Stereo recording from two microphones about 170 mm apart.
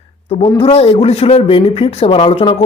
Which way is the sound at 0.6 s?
35° left (ahead or behind).